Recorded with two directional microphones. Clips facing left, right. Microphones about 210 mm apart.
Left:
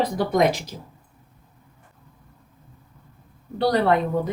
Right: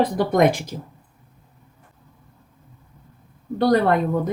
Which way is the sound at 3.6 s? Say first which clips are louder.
Right 2 dB; 50° right (ahead or behind).